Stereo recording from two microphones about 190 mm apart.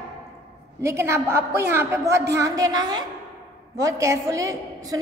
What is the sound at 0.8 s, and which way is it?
A woman's voice, 15° right (ahead or behind).